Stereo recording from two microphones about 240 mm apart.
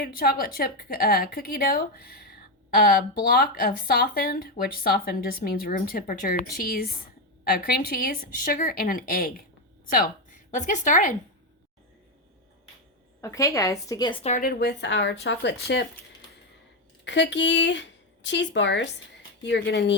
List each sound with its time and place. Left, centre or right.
0.0 s a woman's voice: left
13.2 s a woman's voice: centre; by 15.9 s left
17.1 s speech: left